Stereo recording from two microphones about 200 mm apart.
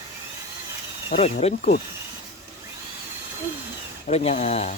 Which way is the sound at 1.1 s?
30° left (ahead or behind).